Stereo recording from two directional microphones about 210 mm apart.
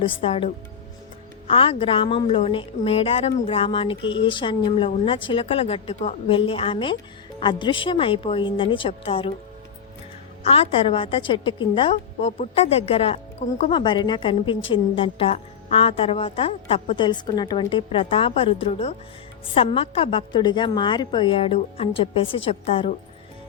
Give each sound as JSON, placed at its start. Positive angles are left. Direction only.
{"t": 0.0, "sound": "a woman's voice", "side_deg": 25}
{"t": 10.5, "sound": "a woman's voice", "side_deg": 25}